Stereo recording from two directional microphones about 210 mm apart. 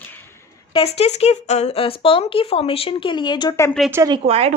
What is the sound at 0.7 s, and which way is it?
A woman's voice, 30° left (ahead or behind).